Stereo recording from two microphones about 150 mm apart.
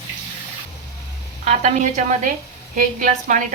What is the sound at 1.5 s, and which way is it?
Speech, 50° right (ahead or behind).